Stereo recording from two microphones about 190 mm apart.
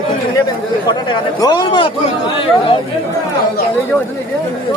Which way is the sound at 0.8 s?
20° left (ahead or behind).